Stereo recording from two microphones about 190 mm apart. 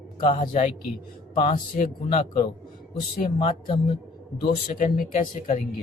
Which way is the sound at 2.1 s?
30° left (ahead or behind).